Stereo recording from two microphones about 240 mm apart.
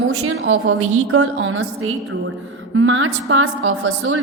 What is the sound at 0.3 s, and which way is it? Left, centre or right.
A woman's voice, right.